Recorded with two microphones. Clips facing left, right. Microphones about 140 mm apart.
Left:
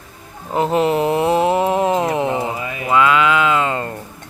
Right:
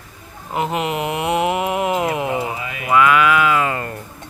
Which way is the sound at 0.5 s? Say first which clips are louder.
Left 5 dB; 30° left (ahead or behind).